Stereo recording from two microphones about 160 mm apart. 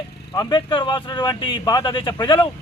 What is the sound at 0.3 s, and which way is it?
A man's voice, 30° left (ahead or behind).